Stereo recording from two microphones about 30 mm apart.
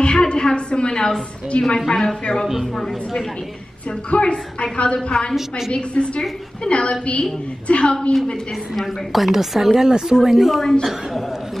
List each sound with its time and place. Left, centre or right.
0.0 s a sound: left
1.5 s a woman's voice: left
1.9 s a woman's voice: centre
2.4 s speech: centre
2.7 s a woman's voice: centre
4.1 s a woman's voice: left
8.7 s a woman's voice: centre
10.6 s a woman's voice: centre